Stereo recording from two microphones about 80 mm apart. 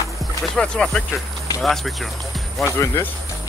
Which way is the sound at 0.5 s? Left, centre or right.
Centre.